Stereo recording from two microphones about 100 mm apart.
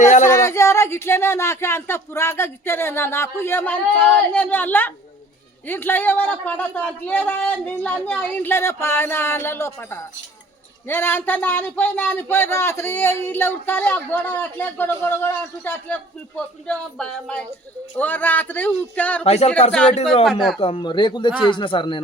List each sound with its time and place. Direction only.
0.3 s speech: 30° left (ahead or behind)
19.2 s speech: 90° left
20.2 s speech: centre (ahead or behind)
20.6 s speech: 60° left (ahead or behind)